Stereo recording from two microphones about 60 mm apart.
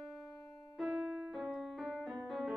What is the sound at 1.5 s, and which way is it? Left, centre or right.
Music, centre.